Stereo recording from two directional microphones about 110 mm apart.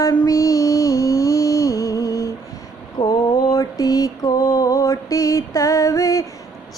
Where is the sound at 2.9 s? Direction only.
35° left (ahead or behind).